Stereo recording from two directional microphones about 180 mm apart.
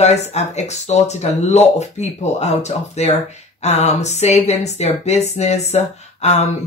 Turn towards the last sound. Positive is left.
turn(degrees=40)  # may be behind; listen again after turning